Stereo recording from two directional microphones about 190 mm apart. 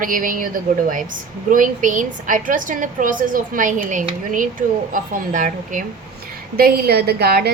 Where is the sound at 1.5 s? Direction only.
45° right (ahead or behind).